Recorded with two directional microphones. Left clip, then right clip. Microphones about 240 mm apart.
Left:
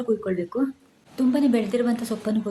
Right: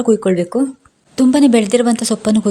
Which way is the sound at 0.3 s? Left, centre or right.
Right.